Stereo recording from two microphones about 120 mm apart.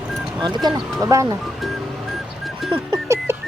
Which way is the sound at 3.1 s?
25° right (ahead or behind).